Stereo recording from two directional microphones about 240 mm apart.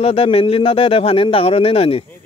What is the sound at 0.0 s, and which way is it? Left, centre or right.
Speech, left.